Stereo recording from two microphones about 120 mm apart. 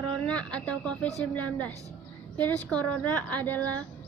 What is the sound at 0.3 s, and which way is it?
Speech, 10° left (ahead or behind).